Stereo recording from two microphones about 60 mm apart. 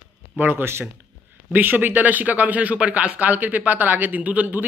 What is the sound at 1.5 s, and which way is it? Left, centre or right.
Speech, right.